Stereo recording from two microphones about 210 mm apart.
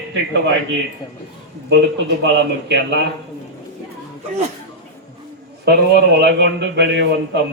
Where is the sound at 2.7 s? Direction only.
55° right (ahead or behind).